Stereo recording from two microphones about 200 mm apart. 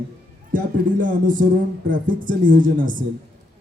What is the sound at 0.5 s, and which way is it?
Speech, 40° right (ahead or behind).